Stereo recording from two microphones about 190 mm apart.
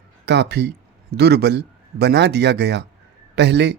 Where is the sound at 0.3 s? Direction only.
60° right (ahead or behind).